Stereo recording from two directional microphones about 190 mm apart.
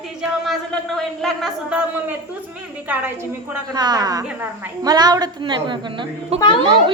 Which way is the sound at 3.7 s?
20° right (ahead or behind).